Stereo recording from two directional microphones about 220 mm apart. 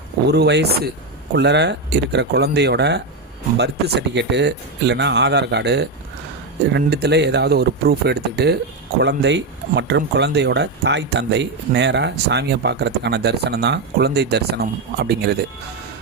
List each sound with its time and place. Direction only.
0.3 s speech: 50° right (ahead or behind)